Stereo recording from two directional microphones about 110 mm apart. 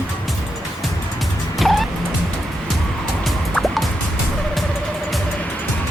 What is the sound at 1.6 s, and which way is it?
Music, centre (ahead or behind).